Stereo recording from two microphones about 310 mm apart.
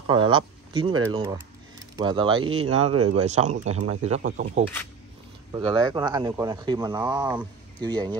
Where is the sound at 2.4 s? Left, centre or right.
Right.